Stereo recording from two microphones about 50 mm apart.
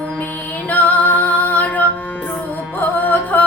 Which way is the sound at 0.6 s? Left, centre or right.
Left.